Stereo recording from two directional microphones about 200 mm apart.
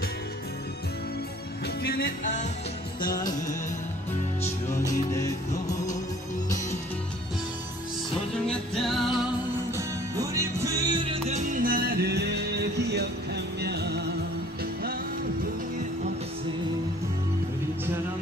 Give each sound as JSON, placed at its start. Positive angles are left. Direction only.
{"t": 1.8, "sound": "music", "side_deg": 50}
{"t": 3.2, "sound": "music", "side_deg": 20}
{"t": 8.5, "sound": "music", "side_deg": 0}
{"t": 9.8, "sound": "music", "side_deg": -15}